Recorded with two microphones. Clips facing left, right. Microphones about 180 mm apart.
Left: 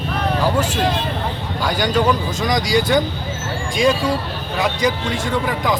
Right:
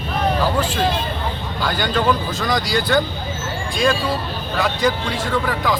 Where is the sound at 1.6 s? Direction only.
10° left (ahead or behind).